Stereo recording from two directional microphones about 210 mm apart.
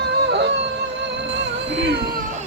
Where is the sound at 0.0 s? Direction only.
55° right (ahead or behind).